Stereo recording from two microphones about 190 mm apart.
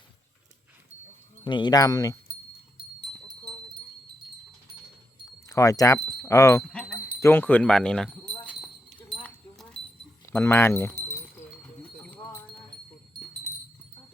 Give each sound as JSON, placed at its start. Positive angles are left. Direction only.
{"t": 1.5, "sound": "speech", "side_deg": 25}
{"t": 5.5, "sound": "wind chime", "side_deg": 15}
{"t": 6.6, "sound": "speech", "side_deg": 5}
{"t": 9.0, "sound": "a sound", "side_deg": 5}
{"t": 10.2, "sound": "wind chime", "side_deg": 10}
{"t": 11.5, "sound": "horse", "side_deg": 5}